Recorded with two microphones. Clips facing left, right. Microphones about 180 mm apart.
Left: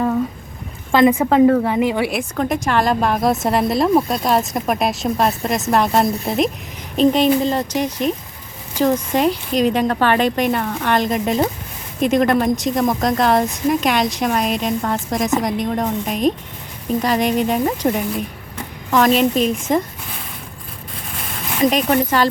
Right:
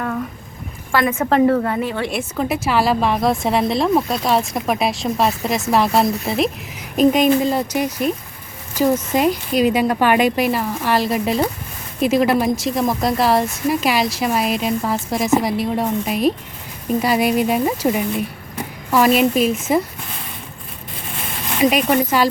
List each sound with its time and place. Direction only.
0.9 s a woman's voice: 20° left (ahead or behind)
1.3 s speech: centre (ahead or behind)
1.7 s speech: 15° left (ahead or behind)
2.0 s a woman's voice: centre (ahead or behind)
21.6 s a woman's voice: 10° right (ahead or behind)